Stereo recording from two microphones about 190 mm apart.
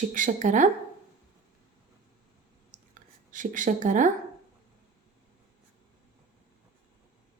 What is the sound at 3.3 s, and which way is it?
Speech, 45° right (ahead or behind).